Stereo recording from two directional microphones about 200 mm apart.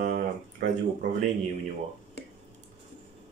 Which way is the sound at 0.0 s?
45° right (ahead or behind).